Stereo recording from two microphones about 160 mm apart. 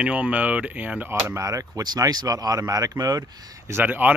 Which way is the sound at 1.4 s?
20° right (ahead or behind).